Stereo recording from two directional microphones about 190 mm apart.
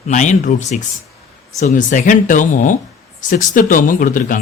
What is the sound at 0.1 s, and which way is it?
Speech, 40° left (ahead or behind).